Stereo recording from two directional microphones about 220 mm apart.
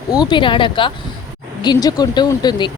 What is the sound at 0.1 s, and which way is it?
Speech, 20° left (ahead or behind).